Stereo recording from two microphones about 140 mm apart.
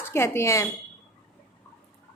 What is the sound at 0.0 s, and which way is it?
Speech, 20° left (ahead or behind).